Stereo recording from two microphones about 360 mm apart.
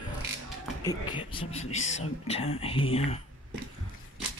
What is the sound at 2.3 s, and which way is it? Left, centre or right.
Speech, centre.